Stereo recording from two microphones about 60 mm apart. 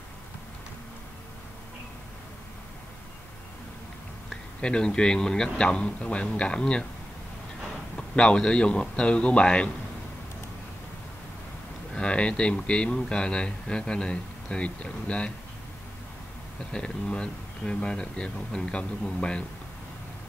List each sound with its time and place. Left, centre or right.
4.3 s speech: centre
8.2 s speech: centre
11.9 s speech: centre
16.7 s speech: centre